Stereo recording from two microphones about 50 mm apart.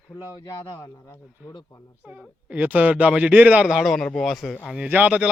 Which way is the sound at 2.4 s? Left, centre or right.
Right.